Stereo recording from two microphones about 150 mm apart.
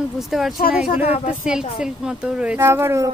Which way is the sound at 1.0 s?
40° left (ahead or behind).